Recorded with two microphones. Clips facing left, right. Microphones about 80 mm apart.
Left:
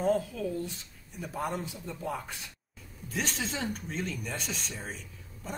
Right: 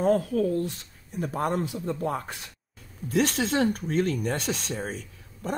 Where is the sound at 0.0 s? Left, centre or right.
Right.